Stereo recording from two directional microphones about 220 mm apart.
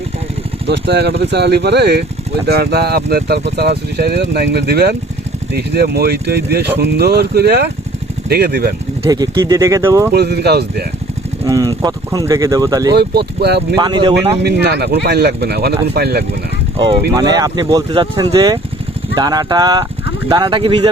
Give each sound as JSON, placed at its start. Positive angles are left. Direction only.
{"t": 0.7, "sound": "speech", "side_deg": -50}
{"t": 9.0, "sound": "speech", "side_deg": -15}
{"t": 10.1, "sound": "speech", "side_deg": -45}
{"t": 11.4, "sound": "speech", "side_deg": -15}
{"t": 12.9, "sound": "speech", "side_deg": -45}
{"t": 13.7, "sound": "speech", "side_deg": -20}
{"t": 14.4, "sound": "speech", "side_deg": -50}
{"t": 16.7, "sound": "speech", "side_deg": -25}